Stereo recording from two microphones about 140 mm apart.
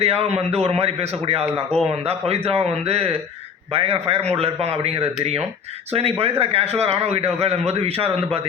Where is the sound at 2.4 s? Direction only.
45° right (ahead or behind).